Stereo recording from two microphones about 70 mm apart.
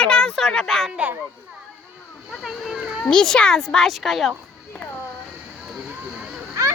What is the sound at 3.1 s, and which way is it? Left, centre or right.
Speech, centre.